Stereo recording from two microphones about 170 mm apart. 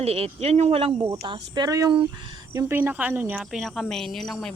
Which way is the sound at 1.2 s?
30° right (ahead or behind).